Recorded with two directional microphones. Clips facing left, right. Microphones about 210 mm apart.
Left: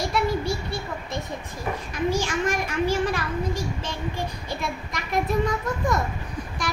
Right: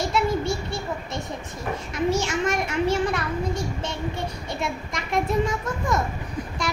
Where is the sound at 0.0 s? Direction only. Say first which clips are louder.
Right 1 dB; 25° right (ahead or behind).